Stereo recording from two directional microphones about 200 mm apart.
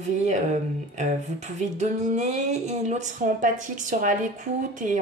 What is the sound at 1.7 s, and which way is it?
A woman's voice, 35° right (ahead or behind).